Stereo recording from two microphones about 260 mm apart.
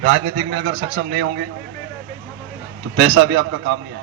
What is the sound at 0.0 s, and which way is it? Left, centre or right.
A man's voice, right.